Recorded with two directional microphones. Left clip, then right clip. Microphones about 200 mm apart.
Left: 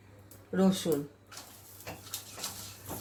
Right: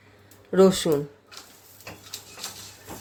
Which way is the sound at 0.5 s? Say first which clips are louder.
Right 12 dB; 40° right (ahead or behind).